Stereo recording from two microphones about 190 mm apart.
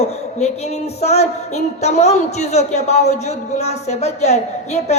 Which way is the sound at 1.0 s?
35° left (ahead or behind).